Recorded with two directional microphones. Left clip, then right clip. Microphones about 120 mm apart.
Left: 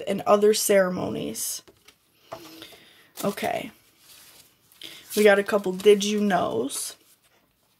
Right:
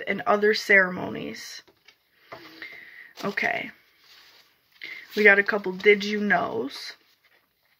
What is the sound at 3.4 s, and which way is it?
Speech, 50° left (ahead or behind).